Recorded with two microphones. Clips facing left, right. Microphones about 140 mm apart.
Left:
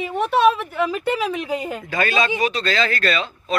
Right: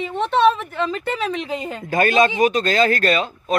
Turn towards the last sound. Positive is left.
turn(degrees=-45)  # may be behind; listen again after turning